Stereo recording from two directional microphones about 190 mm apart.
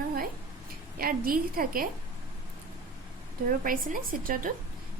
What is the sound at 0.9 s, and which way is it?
Speech, 50° right (ahead or behind).